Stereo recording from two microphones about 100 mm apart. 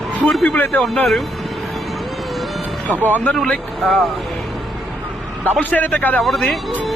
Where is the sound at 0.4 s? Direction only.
15° left (ahead or behind).